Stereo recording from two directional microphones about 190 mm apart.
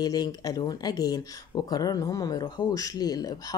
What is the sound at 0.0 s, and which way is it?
Speech, 20° left (ahead or behind).